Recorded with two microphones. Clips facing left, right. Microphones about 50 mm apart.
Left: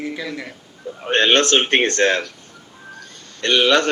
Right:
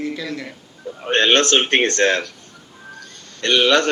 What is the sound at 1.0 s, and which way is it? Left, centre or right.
Speech, centre.